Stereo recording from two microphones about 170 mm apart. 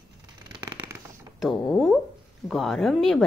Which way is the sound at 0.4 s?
25° right (ahead or behind).